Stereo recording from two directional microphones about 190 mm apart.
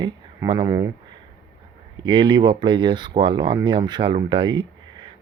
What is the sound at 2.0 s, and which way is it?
Speech, 25° right (ahead or behind).